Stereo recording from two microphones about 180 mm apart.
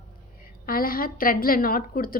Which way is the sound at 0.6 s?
55° left (ahead or behind).